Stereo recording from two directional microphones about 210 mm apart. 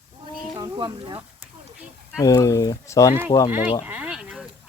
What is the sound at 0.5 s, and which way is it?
Speech, 20° right (ahead or behind).